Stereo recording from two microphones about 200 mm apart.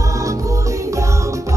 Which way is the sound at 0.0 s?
15° right (ahead or behind).